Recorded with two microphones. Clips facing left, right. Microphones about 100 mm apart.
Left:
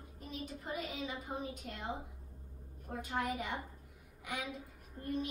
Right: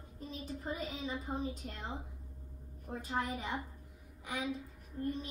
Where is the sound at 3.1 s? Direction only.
30° right (ahead or behind).